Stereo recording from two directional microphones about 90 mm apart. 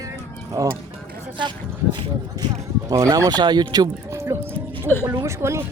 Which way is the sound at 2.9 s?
35° right (ahead or behind).